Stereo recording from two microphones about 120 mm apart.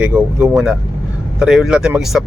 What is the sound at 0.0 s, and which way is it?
Speech, 10° right (ahead or behind).